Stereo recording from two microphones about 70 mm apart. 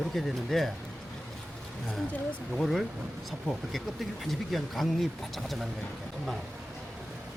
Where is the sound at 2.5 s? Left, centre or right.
Centre.